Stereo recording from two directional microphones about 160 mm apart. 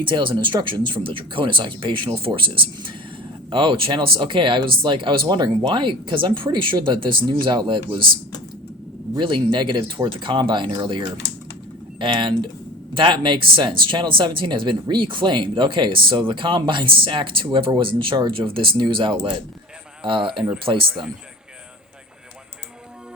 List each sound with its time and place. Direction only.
0.0 s speech: 30° right (ahead or behind)
9.1 s speech: 30° right (ahead or behind)